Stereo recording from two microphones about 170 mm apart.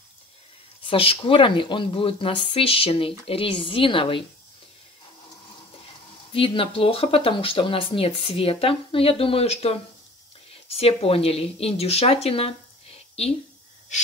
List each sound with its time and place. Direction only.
0.8 s speech: 30° left (ahead or behind)
6.3 s speech: 30° left (ahead or behind)